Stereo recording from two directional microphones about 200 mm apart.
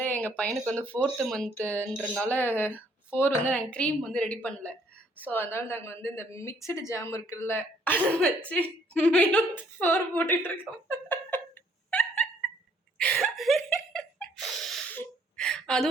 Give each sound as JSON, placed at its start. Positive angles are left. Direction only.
{"t": 0.0, "sound": "a woman's voice", "side_deg": 10}
{"t": 11.9, "sound": "a sound", "side_deg": 5}
{"t": 13.0, "sound": "laughter", "side_deg": 5}